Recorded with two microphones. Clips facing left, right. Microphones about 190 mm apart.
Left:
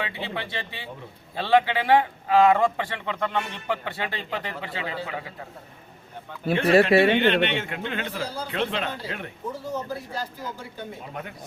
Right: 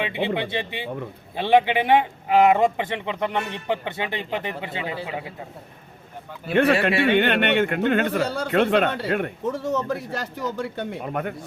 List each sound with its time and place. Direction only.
0.0 s a man's voice: 20° right (ahead or behind)
7.2 s a man's voice: 55° right (ahead or behind)